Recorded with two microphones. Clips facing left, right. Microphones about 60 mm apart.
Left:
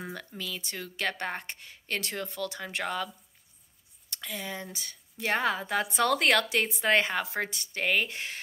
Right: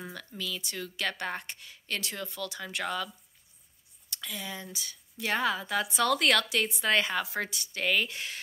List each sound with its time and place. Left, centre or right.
0.0 s speech: left
4.1 s speech: left